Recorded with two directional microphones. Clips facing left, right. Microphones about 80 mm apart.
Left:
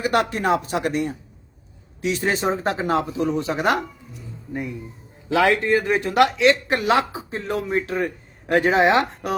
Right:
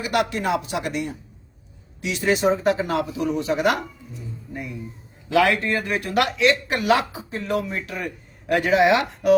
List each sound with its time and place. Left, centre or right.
0.0 s speech: left
5.3 s speech: left